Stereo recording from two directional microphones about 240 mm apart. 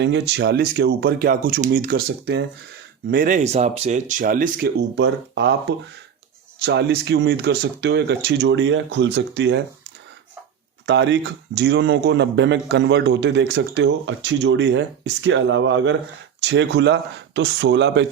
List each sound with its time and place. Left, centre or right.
0.0 s speech: right
10.8 s speech: right